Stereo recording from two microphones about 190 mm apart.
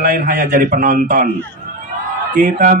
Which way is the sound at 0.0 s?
50° right (ahead or behind).